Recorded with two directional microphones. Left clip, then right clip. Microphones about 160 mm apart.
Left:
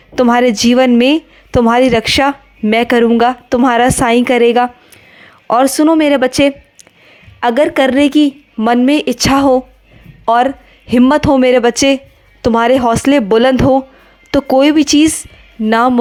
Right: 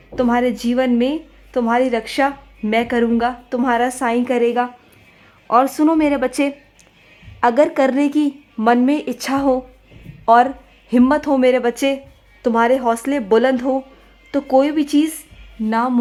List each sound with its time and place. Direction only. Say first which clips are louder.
0.2 s a woman's voice: left 8 dB; 40° left (ahead or behind)